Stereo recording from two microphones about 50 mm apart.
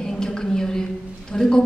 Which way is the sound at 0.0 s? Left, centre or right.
Centre.